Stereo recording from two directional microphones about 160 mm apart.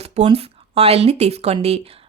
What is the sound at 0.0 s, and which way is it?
Speech, 40° right (ahead or behind).